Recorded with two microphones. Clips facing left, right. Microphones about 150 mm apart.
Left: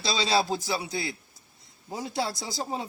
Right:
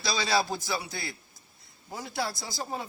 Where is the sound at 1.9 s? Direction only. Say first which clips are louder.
Left 3 dB; 20° left (ahead or behind).